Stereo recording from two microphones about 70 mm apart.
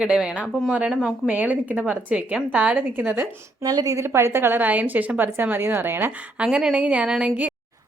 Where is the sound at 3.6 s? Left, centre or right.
Right.